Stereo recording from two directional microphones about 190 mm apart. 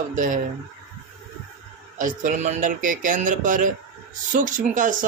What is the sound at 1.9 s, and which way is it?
Speech, 45° right (ahead or behind).